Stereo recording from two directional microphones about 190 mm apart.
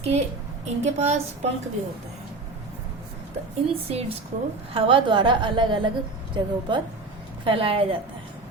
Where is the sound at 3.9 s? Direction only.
30° right (ahead or behind).